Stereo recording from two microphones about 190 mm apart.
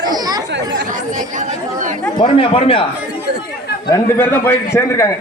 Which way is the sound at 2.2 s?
30° left (ahead or behind).